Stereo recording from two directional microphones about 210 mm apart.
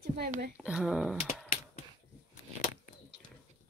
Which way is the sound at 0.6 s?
5° right (ahead or behind).